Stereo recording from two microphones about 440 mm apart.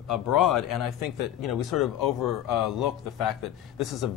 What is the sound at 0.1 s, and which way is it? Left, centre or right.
Speech, left.